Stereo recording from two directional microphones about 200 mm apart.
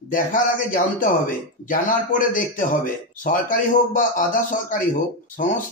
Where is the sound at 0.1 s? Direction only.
45° left (ahead or behind).